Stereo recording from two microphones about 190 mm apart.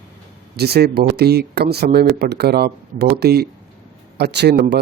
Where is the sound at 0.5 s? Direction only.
60° right (ahead or behind).